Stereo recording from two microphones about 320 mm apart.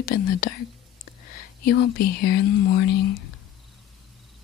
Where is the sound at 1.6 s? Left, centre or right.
Left.